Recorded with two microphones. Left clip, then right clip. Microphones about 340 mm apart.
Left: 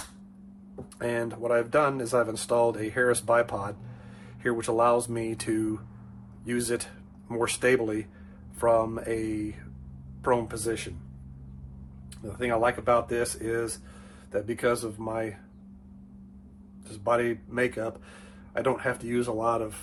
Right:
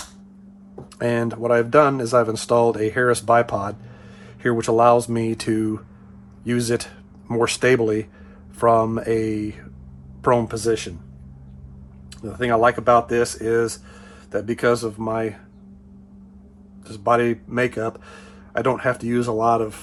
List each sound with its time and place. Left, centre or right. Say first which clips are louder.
0.9 s speech: right 8 dB; right
12.4 s speech: right 8 dB; right
16.9 s speech: right 7 dB; right